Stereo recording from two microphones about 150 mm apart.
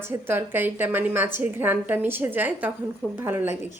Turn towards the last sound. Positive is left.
turn(degrees=-15)  # may be behind; listen again after turning